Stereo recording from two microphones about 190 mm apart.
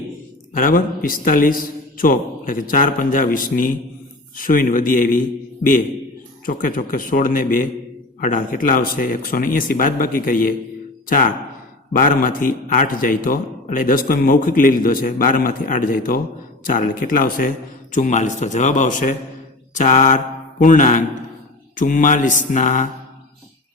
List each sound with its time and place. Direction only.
0.5 s a man's voice: 45° left (ahead or behind)
6.4 s a man's voice: 45° left (ahead or behind)
19.7 s mantra: 40° left (ahead or behind)
21.8 s a man's voice: 45° left (ahead or behind)